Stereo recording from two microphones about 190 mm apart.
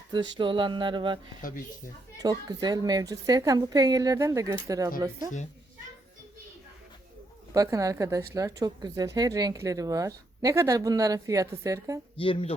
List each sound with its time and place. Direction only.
0.1 s a woman's voice: 25° right (ahead or behind)
1.4 s speech: 45° left (ahead or behind)
2.1 s a woman's voice: 20° right (ahead or behind)
7.5 s speech: 15° right (ahead or behind)
12.1 s speech: 30° left (ahead or behind)